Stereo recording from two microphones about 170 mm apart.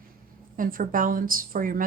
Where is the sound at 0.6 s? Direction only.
55° right (ahead or behind).